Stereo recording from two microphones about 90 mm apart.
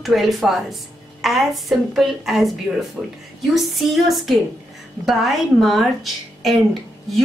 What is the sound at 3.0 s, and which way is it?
Speech, 20° right (ahead or behind).